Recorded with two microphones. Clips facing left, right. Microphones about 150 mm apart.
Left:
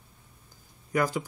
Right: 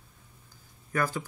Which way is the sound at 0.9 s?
15° left (ahead or behind).